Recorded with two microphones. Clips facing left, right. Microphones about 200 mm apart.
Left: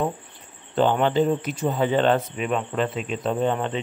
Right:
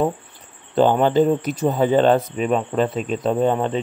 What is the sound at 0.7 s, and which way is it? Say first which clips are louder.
Speech: right 4 dB; 40° right (ahead or behind).